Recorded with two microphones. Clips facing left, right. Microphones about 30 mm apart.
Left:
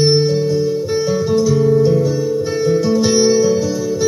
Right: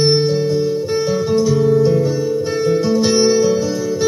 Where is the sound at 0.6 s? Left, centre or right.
Centre.